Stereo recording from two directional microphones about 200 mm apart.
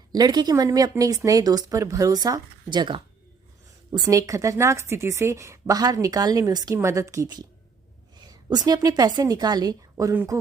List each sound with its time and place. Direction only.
0.1 s a woman's voice: 20° right (ahead or behind)